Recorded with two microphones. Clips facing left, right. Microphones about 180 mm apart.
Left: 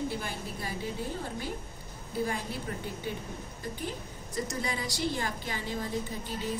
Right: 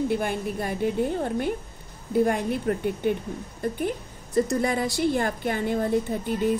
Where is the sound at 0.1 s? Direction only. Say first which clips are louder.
Right 11 dB; 60° right (ahead or behind).